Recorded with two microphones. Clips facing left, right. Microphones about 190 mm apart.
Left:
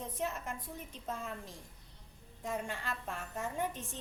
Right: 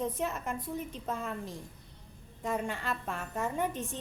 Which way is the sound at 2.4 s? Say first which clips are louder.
Right 5 dB; 65° right (ahead or behind).